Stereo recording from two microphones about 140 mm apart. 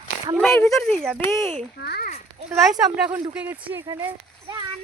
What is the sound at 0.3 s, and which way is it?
Speech, 5° left (ahead or behind).